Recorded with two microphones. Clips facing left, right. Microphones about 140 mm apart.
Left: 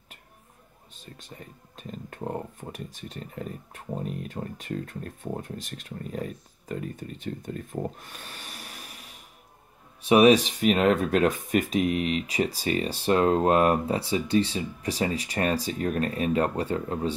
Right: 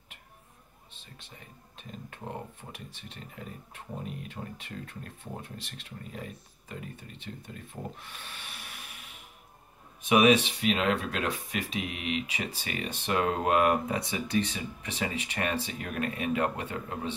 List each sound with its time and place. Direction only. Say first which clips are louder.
0.9 s speech: left 8 dB; 40° left (ahead or behind)